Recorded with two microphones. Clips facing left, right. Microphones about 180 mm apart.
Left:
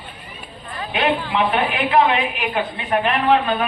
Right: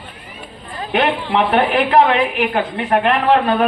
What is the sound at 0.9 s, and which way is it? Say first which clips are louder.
A woman's voice: right 3 dB; 65° right (ahead or behind).